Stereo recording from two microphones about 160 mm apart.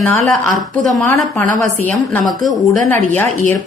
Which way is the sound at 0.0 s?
Centre (ahead or behind).